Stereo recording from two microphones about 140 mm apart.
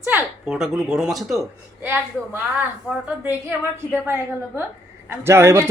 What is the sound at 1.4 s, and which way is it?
Speech, 15° right (ahead or behind).